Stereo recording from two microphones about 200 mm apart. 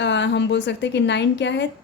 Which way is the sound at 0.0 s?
60° left (ahead or behind).